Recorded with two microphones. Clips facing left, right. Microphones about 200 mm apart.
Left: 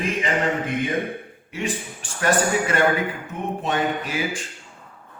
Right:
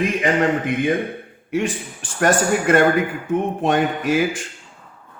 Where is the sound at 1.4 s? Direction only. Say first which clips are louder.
Right 6 dB; 55° right (ahead or behind).